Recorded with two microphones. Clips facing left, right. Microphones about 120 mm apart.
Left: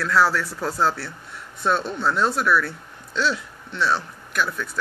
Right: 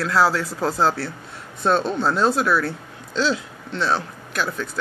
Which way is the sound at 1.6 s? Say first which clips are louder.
Right 3 dB; 25° right (ahead or behind).